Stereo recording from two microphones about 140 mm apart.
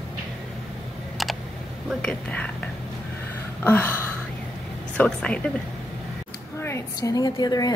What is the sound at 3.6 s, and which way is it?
Gasp, 15° left (ahead or behind).